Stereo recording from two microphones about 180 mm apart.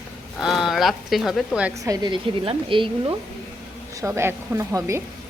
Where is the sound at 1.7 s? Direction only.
20° right (ahead or behind).